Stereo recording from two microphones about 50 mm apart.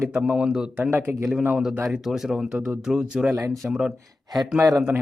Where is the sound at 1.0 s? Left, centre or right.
Right.